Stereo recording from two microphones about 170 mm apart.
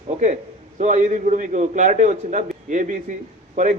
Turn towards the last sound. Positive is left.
turn(degrees=-45)  # may be behind; listen again after turning